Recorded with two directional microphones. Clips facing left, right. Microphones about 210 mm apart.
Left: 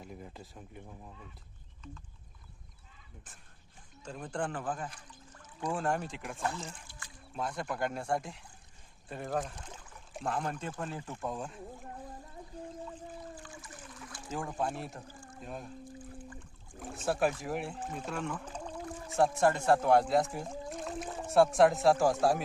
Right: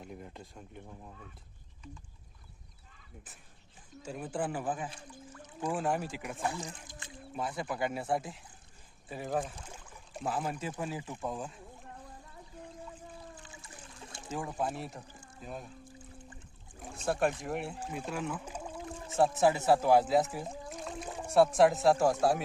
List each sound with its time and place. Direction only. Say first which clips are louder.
0.0 s speech: right 1 dB; centre (ahead or behind)
3.2 s speech: right 3 dB; 10° right (ahead or behind)
7.3 s speech: even; 5° right (ahead or behind)
13.4 s trickle: left 3 dB; 25° right (ahead or behind)
14.3 s speech: even; centre (ahead or behind)
16.8 s speech: even; centre (ahead or behind)